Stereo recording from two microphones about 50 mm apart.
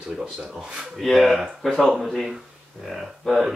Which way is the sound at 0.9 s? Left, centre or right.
Centre.